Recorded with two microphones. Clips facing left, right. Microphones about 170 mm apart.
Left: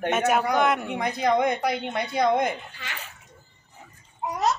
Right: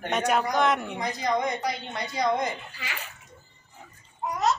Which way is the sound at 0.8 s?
60° left (ahead or behind).